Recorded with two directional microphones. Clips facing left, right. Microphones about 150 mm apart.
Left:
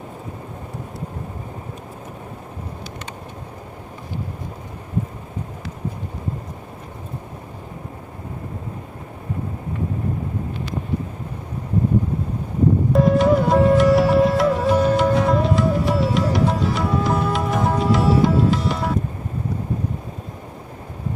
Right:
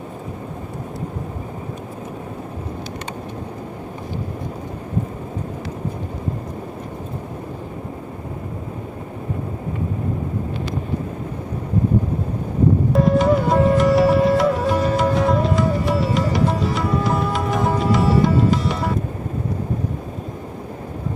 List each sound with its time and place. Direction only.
12.9 s music: centre (ahead or behind)